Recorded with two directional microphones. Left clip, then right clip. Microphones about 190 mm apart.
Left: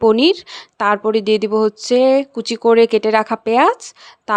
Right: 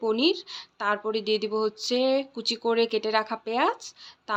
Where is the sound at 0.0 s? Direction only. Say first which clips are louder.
Left 12 dB; 55° left (ahead or behind).